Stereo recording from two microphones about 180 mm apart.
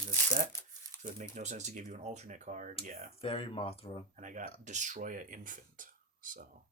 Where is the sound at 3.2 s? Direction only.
30° left (ahead or behind).